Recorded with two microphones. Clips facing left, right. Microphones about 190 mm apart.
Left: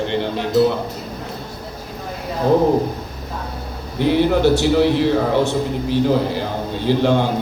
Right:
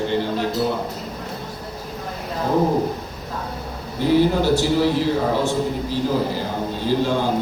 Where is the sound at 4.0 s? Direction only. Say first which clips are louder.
Left 2 dB; 65° left (ahead or behind).